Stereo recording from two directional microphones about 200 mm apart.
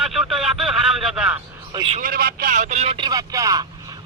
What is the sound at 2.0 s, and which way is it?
Speech, 45° right (ahead or behind).